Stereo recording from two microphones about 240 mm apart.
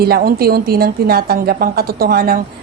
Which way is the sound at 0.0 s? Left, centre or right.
Right.